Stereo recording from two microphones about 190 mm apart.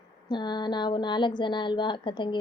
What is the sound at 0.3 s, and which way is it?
A woman's voice, 25° left (ahead or behind).